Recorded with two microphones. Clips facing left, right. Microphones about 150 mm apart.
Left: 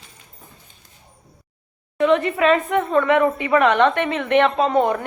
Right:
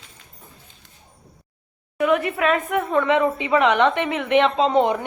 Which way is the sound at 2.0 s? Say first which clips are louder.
Left 3 dB; 10° right (ahead or behind).